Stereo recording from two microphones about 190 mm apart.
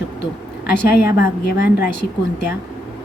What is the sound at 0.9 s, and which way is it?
A woman's voice, 55° left (ahead or behind).